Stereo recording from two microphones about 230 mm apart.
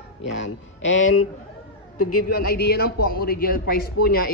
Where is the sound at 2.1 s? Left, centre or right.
Left.